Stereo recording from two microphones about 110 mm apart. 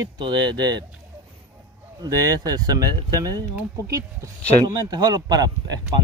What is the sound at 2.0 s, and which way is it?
Speech, 35° right (ahead or behind).